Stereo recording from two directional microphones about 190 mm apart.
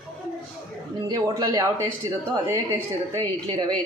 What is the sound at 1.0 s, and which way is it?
A woman's voice, 20° right (ahead or behind).